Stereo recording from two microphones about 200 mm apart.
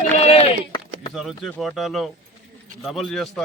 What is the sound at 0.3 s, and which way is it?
Run, 30° left (ahead or behind).